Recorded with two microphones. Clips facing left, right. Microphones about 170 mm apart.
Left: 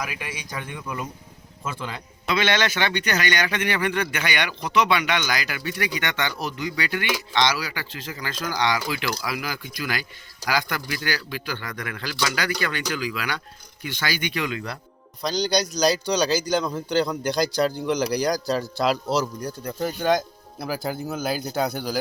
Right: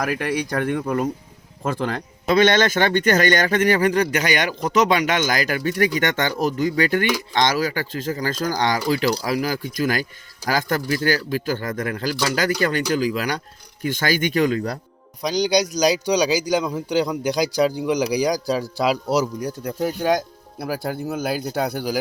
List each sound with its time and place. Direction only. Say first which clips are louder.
0.2 s speech: right 11 dB; 65° right (ahead or behind)
1.7 s a man's voice: right 9 dB; 45° right (ahead or behind)
15.2 s a man's voice: right 4 dB; 15° right (ahead or behind)
19.6 s a man's voice: right 2 dB; 5° right (ahead or behind)